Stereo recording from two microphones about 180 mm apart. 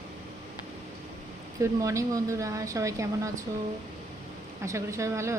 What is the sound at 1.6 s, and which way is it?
Speech, 15° right (ahead or behind).